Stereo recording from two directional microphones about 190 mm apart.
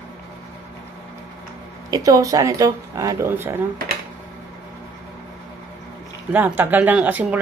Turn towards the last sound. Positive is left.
turn(degrees=-10)  # may be behind; listen again after turning